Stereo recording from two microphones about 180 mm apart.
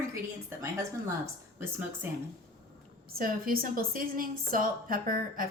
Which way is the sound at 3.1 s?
55° right (ahead or behind).